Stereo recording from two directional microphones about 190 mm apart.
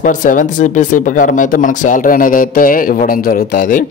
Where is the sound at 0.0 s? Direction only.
45° left (ahead or behind).